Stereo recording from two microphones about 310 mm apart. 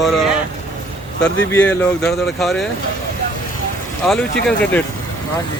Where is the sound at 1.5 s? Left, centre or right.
Centre.